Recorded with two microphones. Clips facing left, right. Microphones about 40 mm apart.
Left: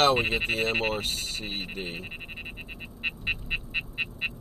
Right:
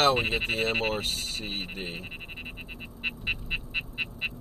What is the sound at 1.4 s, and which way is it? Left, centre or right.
Speech, left.